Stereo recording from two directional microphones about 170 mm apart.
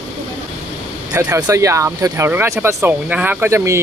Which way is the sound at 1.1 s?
15° right (ahead or behind).